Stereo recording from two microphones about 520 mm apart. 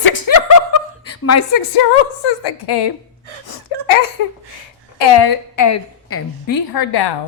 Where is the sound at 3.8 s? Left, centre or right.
Left.